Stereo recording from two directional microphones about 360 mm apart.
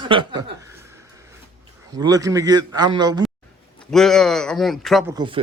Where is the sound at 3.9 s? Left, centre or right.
Centre.